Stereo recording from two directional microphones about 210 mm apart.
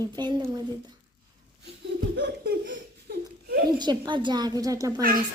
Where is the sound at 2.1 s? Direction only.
55° right (ahead or behind).